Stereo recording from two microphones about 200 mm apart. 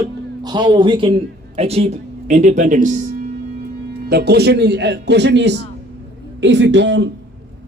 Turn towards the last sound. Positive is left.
turn(degrees=-60)  # may be behind; listen again after turning